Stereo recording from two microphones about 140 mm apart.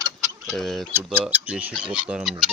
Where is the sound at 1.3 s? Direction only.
10° right (ahead or behind).